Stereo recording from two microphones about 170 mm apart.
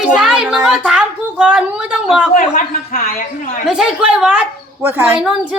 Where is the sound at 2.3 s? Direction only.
55° left (ahead or behind).